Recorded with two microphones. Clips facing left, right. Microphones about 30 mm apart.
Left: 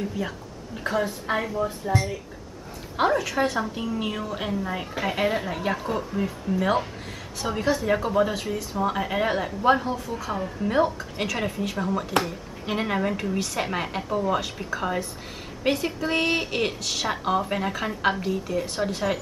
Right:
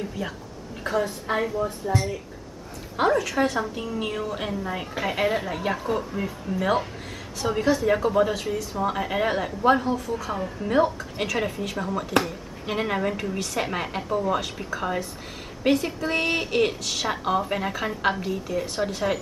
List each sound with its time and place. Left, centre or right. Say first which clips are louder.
0.0 s speech: left 1 dB; centre
3.0 s speech: right 1 dB; centre